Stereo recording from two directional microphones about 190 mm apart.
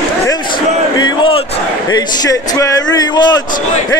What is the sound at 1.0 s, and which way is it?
Battle cry, 25° left (ahead or behind).